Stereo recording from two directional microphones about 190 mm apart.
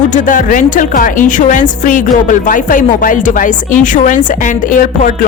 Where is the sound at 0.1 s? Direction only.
40° left (ahead or behind).